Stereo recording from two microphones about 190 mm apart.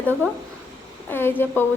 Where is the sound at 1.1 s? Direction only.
10° left (ahead or behind).